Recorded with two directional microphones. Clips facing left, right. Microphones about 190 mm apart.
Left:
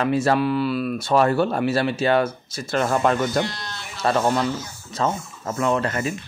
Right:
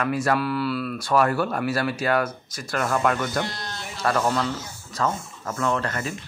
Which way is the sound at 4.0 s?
25° left (ahead or behind).